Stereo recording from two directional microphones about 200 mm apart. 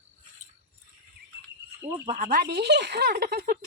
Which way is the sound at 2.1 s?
40° right (ahead or behind).